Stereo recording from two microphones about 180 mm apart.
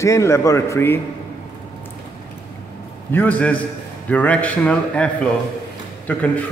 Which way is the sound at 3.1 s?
10° left (ahead or behind).